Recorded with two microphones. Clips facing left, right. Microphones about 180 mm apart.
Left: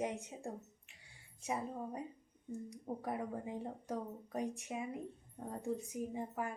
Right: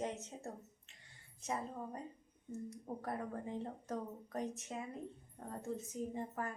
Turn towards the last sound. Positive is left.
turn(degrees=10)  # may be behind; listen again after turning